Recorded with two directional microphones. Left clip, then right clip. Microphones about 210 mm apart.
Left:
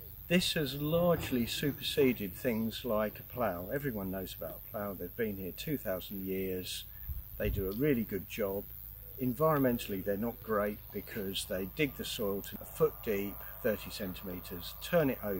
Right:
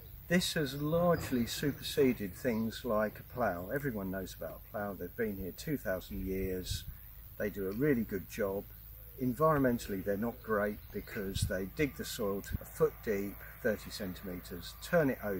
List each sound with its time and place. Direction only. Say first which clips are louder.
0.3 s speech: left 1 dB; centre (ahead or behind)
14.8 s speech: even; centre (ahead or behind)